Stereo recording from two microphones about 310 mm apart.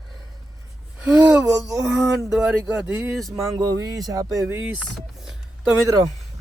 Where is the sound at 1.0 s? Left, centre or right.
Centre.